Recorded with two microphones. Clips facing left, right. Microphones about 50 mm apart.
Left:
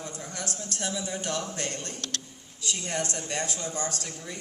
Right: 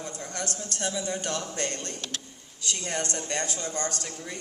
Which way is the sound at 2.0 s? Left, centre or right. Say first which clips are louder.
Even; centre.